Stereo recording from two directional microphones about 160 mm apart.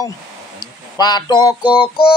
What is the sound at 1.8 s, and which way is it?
Music, 35° left (ahead or behind).